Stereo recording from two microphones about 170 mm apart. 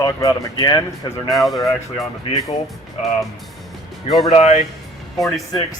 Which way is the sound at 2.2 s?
35° left (ahead or behind).